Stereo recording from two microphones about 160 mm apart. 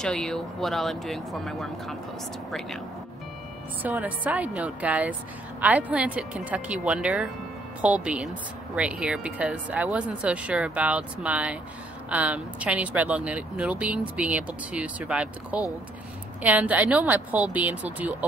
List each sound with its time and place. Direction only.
0.0 s speech: 5° left (ahead or behind)
3.8 s speech: 10° right (ahead or behind)